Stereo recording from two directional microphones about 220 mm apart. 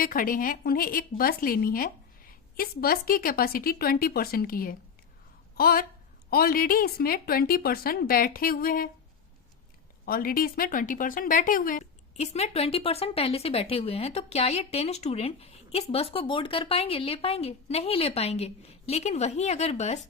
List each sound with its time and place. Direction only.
0.0 s speech: 40° left (ahead or behind)
10.1 s speech: 40° left (ahead or behind)